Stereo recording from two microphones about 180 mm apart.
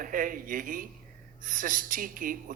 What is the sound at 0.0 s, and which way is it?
Speech, 50° right (ahead or behind).